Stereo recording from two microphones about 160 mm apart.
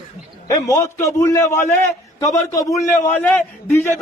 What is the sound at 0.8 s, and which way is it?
A man's voice, 20° left (ahead or behind).